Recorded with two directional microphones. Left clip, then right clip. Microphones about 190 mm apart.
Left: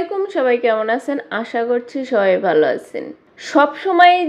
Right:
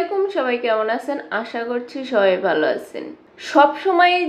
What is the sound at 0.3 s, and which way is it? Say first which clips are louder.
A woman's voice: left 4 dB; 40° left (ahead or behind).